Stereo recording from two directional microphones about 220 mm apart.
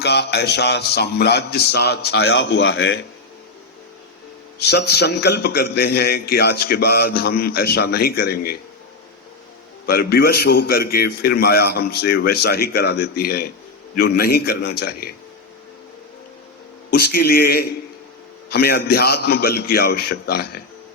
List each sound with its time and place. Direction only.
0.0 s a man's voice: 50° left (ahead or behind)
4.6 s a man's voice: 50° left (ahead or behind)
9.8 s a man's voice: 45° left (ahead or behind)
16.9 s a man's voice: 45° left (ahead or behind)